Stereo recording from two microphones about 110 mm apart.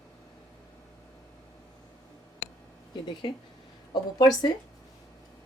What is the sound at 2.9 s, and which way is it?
Speech, 45° left (ahead or behind).